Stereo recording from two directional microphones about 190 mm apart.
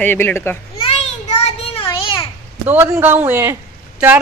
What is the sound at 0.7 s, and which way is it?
Children playing, 35° left (ahead or behind).